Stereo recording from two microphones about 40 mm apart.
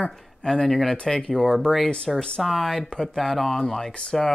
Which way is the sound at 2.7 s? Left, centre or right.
Centre.